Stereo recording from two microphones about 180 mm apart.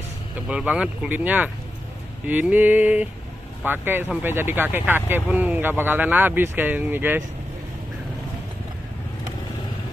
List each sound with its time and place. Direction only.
0.5 s speech: 5° right (ahead or behind)